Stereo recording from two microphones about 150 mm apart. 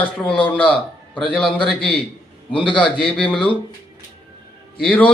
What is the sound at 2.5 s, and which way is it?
Speech, 35° left (ahead or behind).